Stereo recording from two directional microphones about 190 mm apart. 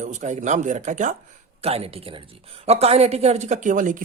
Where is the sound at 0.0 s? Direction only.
40° right (ahead or behind).